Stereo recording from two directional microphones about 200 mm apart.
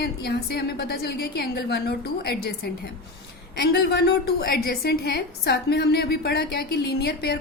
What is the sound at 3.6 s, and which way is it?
A woman's voice, 50° left (ahead or behind).